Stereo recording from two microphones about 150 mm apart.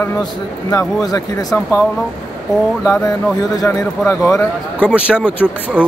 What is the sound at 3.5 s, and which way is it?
A man's voice, 25° left (ahead or behind).